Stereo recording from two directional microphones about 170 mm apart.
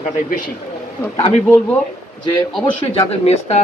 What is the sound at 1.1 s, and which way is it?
Speech, 30° left (ahead or behind).